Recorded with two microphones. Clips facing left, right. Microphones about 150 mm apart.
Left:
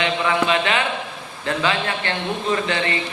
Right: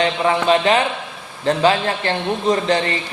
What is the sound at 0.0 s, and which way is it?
A man's voice, 35° right (ahead or behind).